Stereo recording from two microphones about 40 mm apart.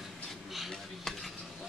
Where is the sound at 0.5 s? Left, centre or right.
Centre.